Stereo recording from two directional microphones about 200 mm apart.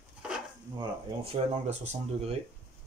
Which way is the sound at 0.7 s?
30° right (ahead or behind).